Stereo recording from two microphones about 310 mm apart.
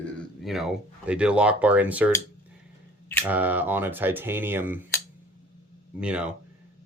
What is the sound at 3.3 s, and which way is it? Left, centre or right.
Speech, centre.